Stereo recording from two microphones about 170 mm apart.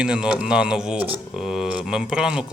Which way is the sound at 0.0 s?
5° right (ahead or behind).